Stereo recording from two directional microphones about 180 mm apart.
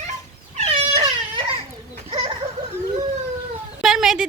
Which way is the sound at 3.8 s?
5° right (ahead or behind).